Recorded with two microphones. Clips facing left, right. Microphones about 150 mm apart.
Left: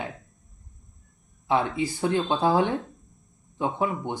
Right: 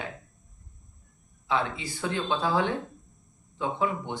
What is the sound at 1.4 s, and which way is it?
Speech, 50° left (ahead or behind).